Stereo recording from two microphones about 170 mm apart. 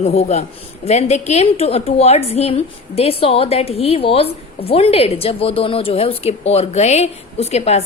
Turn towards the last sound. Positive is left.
turn(degrees=40)  # may be behind; listen again after turning